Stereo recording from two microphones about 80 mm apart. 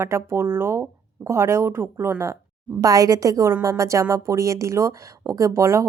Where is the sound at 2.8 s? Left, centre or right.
Right.